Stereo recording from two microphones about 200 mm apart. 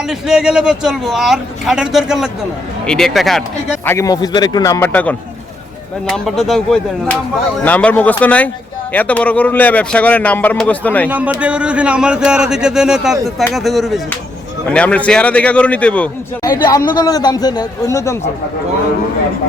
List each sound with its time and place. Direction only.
0.1 s a man's voice: 5° right (ahead or behind)
3.8 s a man's voice: 15° left (ahead or behind)
11.1 s a man's voice: 5° right (ahead or behind)
16.6 s a man's voice: 20° left (ahead or behind)